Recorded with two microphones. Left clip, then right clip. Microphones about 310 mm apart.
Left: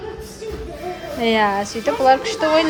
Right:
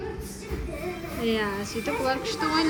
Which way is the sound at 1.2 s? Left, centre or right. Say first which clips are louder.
Left 11 dB; centre.